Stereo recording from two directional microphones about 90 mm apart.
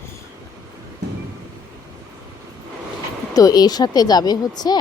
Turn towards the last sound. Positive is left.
turn(degrees=50)  # may be behind; listen again after turning